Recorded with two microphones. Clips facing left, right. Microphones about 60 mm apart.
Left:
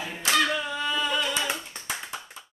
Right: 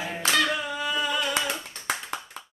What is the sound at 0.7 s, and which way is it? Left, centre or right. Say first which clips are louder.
Singing: even; centre.